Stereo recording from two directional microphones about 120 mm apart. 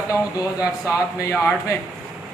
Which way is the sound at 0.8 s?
25° left (ahead or behind).